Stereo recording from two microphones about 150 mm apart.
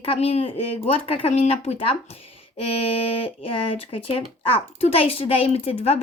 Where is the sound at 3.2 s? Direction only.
40° left (ahead or behind).